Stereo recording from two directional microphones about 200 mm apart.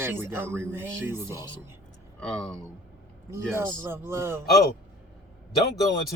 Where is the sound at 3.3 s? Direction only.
10° right (ahead or behind).